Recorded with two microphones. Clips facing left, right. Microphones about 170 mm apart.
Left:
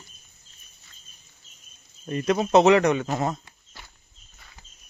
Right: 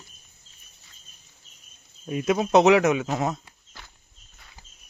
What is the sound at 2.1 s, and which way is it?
Speech, 5° right (ahead or behind).